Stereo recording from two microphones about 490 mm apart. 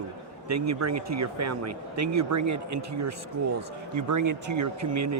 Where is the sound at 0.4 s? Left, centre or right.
Right.